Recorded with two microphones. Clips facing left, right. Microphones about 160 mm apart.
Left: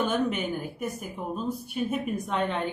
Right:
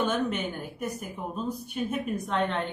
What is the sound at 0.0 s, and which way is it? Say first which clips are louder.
A woman's voice: left 1 dB; 5° left (ahead or behind).